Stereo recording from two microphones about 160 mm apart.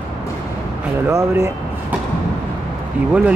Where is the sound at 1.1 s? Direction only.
20° right (ahead or behind).